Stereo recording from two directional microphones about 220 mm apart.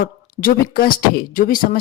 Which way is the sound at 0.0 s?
40° left (ahead or behind).